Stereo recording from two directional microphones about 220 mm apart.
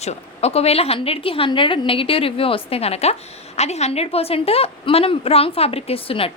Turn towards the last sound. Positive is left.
turn(degrees=25)  # may be behind; listen again after turning